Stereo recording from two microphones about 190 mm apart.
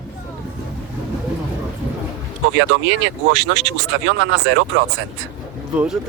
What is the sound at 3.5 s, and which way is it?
Speech, 75° right (ahead or behind).